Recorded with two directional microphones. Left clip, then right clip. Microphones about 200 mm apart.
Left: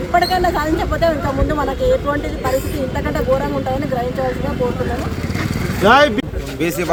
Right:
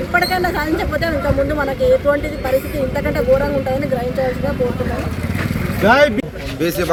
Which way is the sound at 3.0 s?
Centre (ahead or behind).